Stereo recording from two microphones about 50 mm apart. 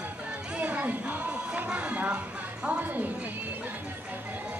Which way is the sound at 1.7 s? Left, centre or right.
Centre.